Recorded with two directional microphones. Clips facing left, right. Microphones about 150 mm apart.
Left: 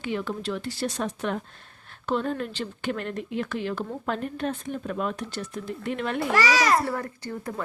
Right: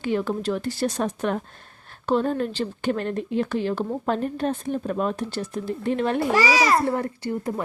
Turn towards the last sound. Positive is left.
turn(degrees=-25)  # may be behind; listen again after turning